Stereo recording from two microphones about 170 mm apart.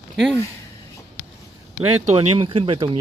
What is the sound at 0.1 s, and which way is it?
Speech, centre (ahead or behind).